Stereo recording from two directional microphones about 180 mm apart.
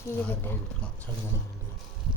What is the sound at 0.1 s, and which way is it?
Speech, 10° left (ahead or behind).